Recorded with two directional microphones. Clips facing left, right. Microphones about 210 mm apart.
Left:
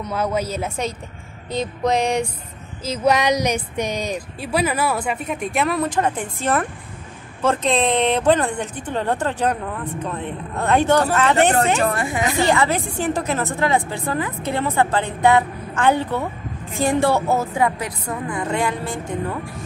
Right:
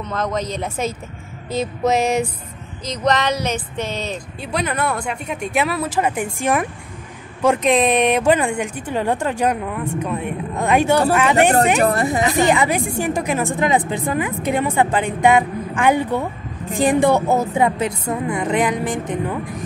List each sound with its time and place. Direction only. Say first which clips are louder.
0.0 s a woman's voice: left 1 dB; 10° left (ahead or behind); by 11.5 s 10° right (ahead or behind)
11.9 s a woman's voice: right 4 dB; 35° right (ahead or behind)
12.4 s speech: even; 15° right (ahead or behind)